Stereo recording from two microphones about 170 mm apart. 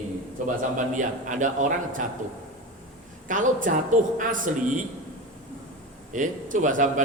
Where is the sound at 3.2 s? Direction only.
50° right (ahead or behind).